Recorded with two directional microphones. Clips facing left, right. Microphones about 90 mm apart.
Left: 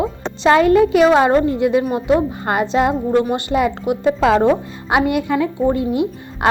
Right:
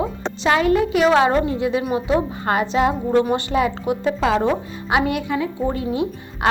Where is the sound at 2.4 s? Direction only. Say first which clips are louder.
Left 2 dB; 20° left (ahead or behind).